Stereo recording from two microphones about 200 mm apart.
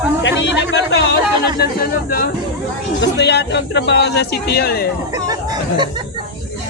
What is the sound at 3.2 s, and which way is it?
Speech, 60° left (ahead or behind).